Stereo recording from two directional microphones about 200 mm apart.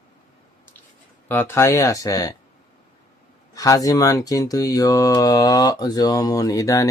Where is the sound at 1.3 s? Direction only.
10° left (ahead or behind).